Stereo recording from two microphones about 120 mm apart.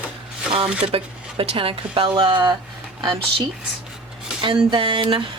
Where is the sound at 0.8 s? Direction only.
55° right (ahead or behind).